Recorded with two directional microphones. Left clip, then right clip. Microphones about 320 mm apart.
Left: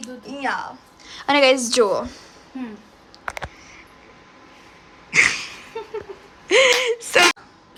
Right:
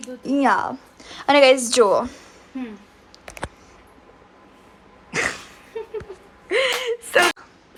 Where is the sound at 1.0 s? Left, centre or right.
Centre.